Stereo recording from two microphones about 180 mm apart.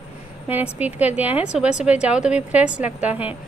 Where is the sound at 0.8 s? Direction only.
10° right (ahead or behind).